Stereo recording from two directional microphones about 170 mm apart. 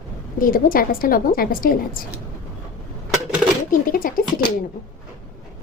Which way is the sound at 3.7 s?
55° left (ahead or behind).